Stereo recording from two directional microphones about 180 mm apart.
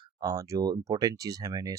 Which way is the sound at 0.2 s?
20° right (ahead or behind).